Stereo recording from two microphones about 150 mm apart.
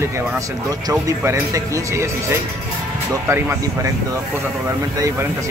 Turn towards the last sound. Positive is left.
turn(degrees=-15)  # may be behind; listen again after turning